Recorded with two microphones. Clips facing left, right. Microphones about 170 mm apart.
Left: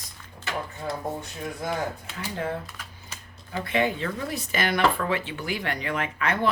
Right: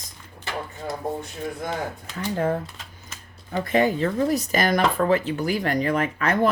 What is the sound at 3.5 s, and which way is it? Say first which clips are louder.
Speech: right 5 dB; 40° right (ahead or behind).